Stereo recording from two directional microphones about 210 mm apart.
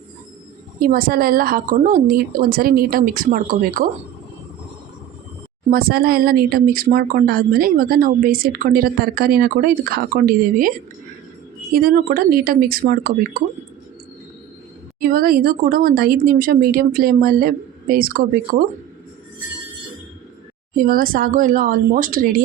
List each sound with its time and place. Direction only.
0.8 s speech: 45° right (ahead or behind)
5.7 s speech: 45° right (ahead or behind)
15.0 s speech: 45° right (ahead or behind)
20.7 s speech: 45° right (ahead or behind)